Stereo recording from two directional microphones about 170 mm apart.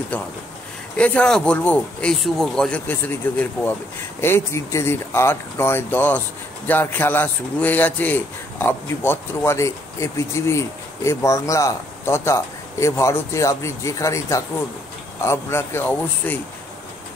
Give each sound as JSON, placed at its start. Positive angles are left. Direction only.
{"t": 0.1, "sound": "a man's voice", "side_deg": 10}